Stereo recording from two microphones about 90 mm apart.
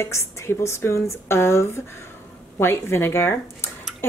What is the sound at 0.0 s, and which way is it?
Speech, 30° left (ahead or behind).